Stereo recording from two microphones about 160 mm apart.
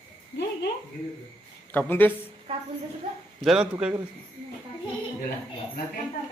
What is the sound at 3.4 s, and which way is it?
Speech, centre (ahead or behind).